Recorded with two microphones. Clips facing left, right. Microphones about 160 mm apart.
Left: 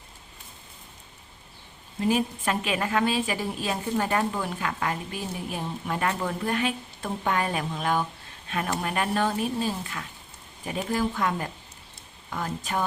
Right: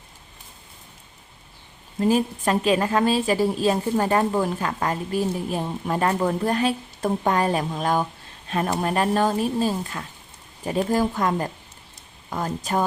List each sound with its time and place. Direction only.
2.0 s a woman's voice: 35° right (ahead or behind)